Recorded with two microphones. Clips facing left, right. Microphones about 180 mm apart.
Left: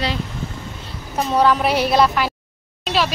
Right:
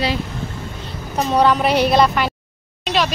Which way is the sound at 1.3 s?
Centre (ahead or behind).